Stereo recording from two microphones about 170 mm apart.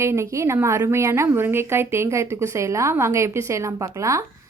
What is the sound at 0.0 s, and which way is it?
A woman's voice, 15° right (ahead or behind).